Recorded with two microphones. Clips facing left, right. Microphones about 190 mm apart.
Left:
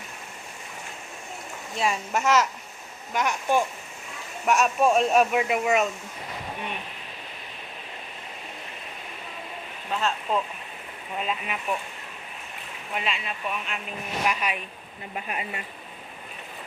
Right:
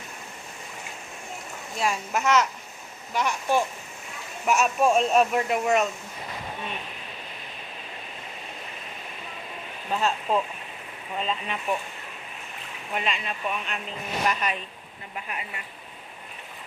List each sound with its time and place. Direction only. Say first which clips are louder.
1.8 s speech: left 1 dB; 5° left (ahead or behind)
9.9 s speech: right 2 dB; 10° right (ahead or behind)
11.2 s speech: even; 10° left (ahead or behind)
12.9 s speech: right 1 dB; centre (ahead or behind)
15.1 s speech: left 3 dB; 25° left (ahead or behind)